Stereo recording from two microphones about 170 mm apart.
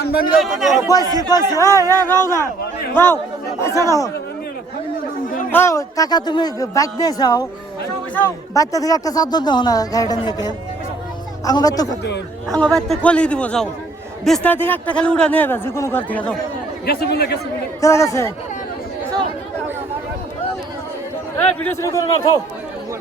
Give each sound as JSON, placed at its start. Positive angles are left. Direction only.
{"t": 0.0, "sound": "speech", "side_deg": 65}
{"t": 0.3, "sound": "speech", "side_deg": 0}
{"t": 1.0, "sound": "a man's voice", "side_deg": -20}
{"t": 1.3, "sound": "speech", "side_deg": 20}
{"t": 1.8, "sound": "a man's voice", "side_deg": -20}
{"t": 2.0, "sound": "speech", "side_deg": 15}
{"t": 5.5, "sound": "speech", "side_deg": 15}
{"t": 12.5, "sound": "speech", "side_deg": 5}
{"t": 16.8, "sound": "speech", "side_deg": 70}
{"t": 17.7, "sound": "speech", "side_deg": 20}
{"t": 21.3, "sound": "a man's voice", "side_deg": 15}